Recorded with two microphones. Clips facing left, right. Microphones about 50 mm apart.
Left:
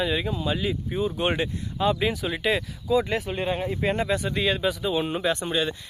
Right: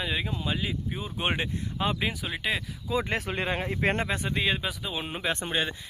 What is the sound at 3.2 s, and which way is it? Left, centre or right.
Speech, right.